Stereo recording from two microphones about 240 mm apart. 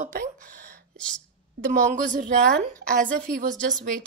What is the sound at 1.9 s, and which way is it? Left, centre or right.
A woman's voice, right.